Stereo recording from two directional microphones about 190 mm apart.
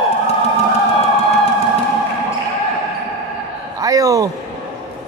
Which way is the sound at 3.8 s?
20° right (ahead or behind).